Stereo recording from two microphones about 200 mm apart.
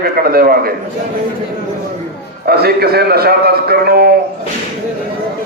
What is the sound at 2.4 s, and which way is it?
A man's voice, 50° right (ahead or behind).